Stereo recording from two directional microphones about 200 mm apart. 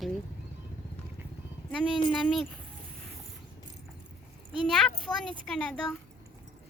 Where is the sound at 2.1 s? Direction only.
Centre (ahead or behind).